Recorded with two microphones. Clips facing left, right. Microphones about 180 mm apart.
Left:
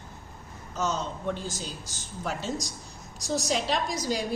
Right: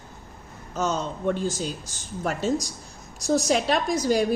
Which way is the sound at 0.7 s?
55° right (ahead or behind).